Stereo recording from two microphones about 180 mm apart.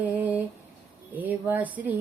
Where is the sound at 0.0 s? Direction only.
10° right (ahead or behind).